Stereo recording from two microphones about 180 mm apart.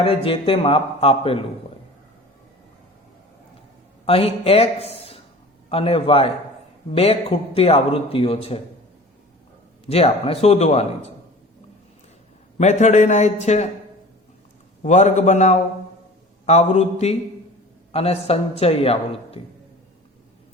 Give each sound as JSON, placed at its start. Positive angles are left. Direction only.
{"t": 0.0, "sound": "a man's voice", "side_deg": 30}
{"t": 4.0, "sound": "a man's voice", "side_deg": 30}
{"t": 9.9, "sound": "a man's voice", "side_deg": 35}
{"t": 12.5, "sound": "a man's voice", "side_deg": 40}
{"t": 14.8, "sound": "a man's voice", "side_deg": 40}